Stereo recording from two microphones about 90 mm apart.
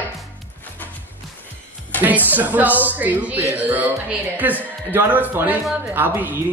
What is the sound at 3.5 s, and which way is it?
Music, 15° right (ahead or behind).